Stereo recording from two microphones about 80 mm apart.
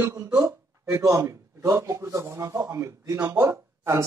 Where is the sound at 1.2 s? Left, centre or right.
Right.